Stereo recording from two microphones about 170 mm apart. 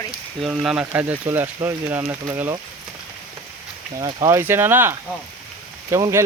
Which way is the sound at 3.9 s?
20° right (ahead or behind).